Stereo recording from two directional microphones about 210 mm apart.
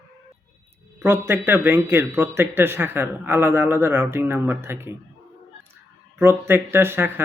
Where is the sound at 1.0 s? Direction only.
10° right (ahead or behind).